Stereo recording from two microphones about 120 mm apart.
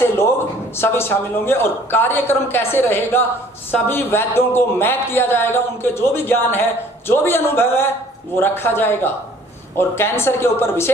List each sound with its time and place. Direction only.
0.8 s speech: 20° left (ahead or behind)